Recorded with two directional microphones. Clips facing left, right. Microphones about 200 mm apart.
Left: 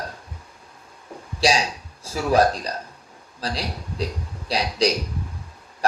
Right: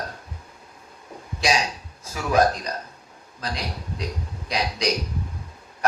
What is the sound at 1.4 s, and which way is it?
A man's voice, 30° left (ahead or behind).